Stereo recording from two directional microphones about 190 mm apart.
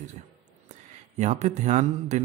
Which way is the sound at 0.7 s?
35° right (ahead or behind).